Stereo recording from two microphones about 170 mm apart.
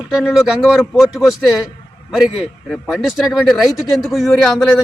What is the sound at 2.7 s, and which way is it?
Speech, centre (ahead or behind).